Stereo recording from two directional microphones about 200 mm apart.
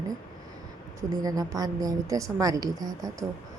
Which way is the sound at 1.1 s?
20° right (ahead or behind).